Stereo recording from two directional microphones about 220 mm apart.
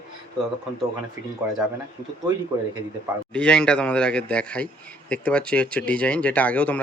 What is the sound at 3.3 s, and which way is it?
Speech, 5° left (ahead or behind).